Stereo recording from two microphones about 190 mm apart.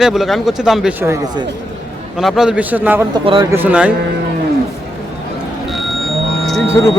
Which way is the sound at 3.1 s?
25° right (ahead or behind).